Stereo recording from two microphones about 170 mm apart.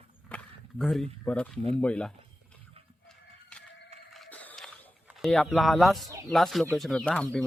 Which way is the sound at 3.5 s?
5° left (ahead or behind).